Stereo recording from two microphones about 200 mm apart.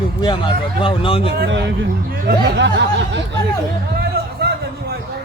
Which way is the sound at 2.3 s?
60° right (ahead or behind).